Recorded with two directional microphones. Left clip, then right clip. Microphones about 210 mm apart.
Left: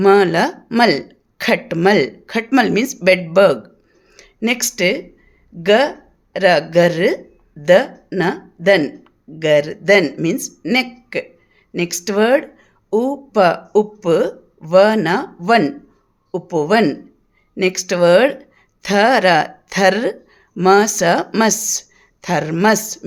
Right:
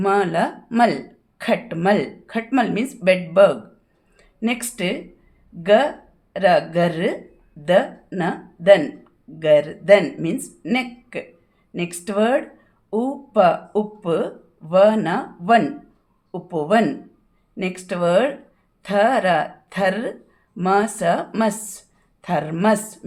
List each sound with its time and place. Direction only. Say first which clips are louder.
0.0 s a woman's voice: left 7 dB; 40° left (ahead or behind)